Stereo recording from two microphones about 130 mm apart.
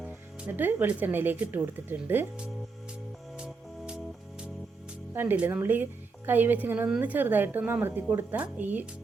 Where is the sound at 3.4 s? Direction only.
5° right (ahead or behind).